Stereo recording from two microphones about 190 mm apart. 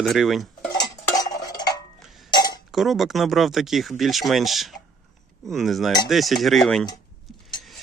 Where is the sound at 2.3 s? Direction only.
20° left (ahead or behind).